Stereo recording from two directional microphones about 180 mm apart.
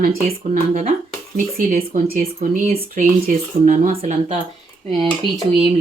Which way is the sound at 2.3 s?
40° right (ahead or behind).